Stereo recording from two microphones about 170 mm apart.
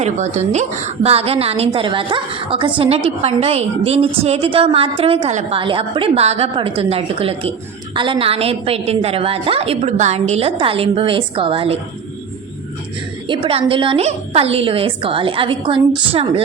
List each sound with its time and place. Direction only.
0.3 s a woman's voice: 40° right (ahead or behind)
13.2 s a woman's voice: 30° right (ahead or behind)